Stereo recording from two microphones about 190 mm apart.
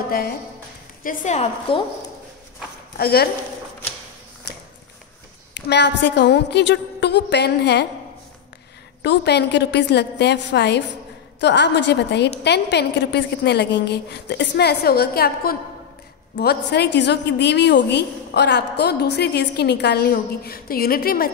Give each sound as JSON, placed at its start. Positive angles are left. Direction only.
{"t": 1.0, "sound": "a woman's voice", "side_deg": 35}
{"t": 3.0, "sound": "a woman's voice", "side_deg": 55}
{"t": 5.5, "sound": "a woman's voice", "side_deg": 65}
{"t": 9.0, "sound": "a woman's voice", "side_deg": 65}